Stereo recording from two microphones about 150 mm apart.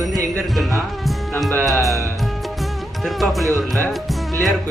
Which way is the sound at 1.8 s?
20° right (ahead or behind).